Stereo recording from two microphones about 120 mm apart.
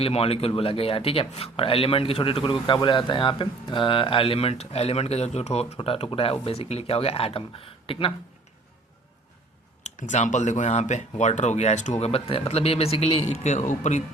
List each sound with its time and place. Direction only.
0.0 s speech: 55° left (ahead or behind)
9.8 s speech: 90° left